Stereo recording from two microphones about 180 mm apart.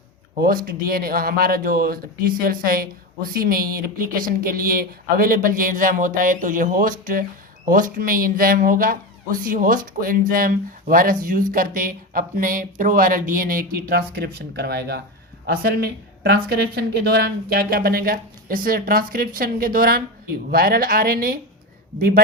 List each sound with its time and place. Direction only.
0.3 s speech: 55° right (ahead or behind)